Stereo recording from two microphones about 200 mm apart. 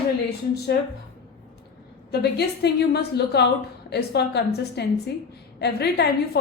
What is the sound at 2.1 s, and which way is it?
A woman's voice, 55° left (ahead or behind).